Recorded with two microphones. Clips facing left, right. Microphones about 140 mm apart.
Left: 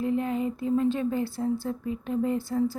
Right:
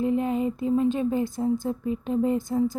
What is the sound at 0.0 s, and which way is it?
Speech, 20° right (ahead or behind).